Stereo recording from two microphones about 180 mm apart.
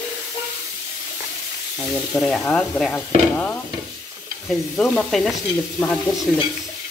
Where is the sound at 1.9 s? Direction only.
Centre (ahead or behind).